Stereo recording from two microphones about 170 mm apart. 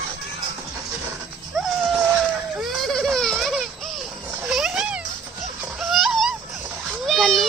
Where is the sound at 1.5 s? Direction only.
Centre (ahead or behind).